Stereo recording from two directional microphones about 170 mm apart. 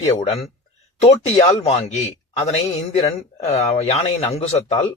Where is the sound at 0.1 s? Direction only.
35° left (ahead or behind).